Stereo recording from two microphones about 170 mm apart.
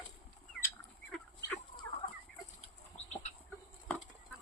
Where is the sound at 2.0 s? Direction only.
45° left (ahead or behind).